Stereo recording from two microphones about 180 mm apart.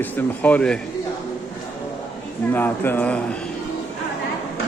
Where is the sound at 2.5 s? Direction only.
10° left (ahead or behind).